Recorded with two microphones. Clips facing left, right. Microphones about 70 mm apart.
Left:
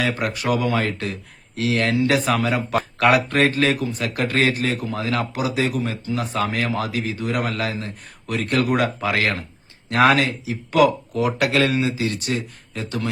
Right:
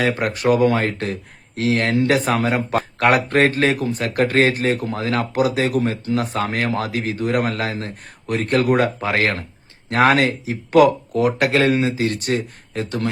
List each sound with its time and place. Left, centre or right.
0.2 s a man's voice: right
4.7 s speech: right